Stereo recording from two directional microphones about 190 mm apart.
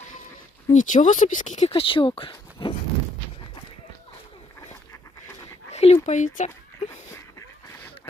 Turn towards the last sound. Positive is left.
turn(degrees=40)  # may be behind; listen again after turning